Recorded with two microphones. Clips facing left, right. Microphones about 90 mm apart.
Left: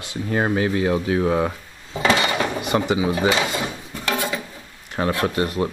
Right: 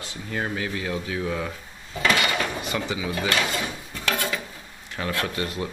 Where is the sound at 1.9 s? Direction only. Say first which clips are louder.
Left 4 dB; 25° left (ahead or behind).